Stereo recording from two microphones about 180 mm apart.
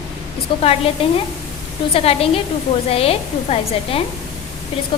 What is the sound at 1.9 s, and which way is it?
A woman's voice, 30° left (ahead or behind).